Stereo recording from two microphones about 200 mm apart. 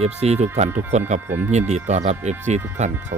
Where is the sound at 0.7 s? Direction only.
10° right (ahead or behind).